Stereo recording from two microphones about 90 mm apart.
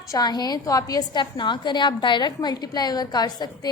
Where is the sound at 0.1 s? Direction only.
50° left (ahead or behind).